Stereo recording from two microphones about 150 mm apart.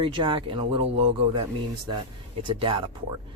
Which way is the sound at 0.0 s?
35° right (ahead or behind).